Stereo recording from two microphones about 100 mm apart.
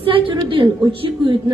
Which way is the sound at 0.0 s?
60° right (ahead or behind).